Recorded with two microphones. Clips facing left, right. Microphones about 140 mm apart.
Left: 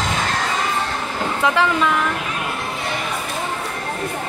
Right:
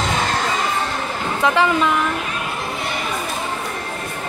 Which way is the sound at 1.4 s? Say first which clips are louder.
Right 2 dB; centre (ahead or behind).